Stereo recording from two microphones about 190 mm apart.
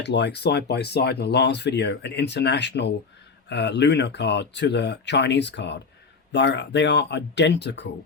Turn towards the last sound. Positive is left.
turn(degrees=65)  # may be behind; listen again after turning